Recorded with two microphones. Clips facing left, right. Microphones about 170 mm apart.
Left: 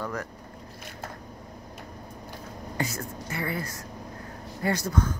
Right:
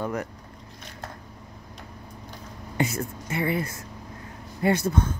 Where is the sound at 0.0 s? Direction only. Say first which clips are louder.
Right 4 dB; 20° right (ahead or behind).